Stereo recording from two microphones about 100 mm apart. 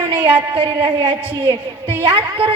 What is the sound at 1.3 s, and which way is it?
A woman's voice, 70° right (ahead or behind).